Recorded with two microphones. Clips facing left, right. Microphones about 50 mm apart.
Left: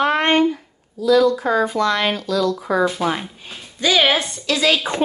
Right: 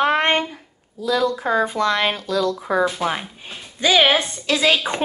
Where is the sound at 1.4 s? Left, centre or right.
Centre.